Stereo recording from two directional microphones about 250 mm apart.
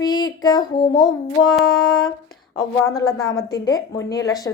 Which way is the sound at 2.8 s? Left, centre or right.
Centre.